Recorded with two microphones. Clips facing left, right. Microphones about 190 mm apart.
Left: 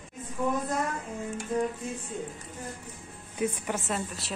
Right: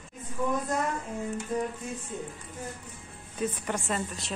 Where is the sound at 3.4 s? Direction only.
10° left (ahead or behind).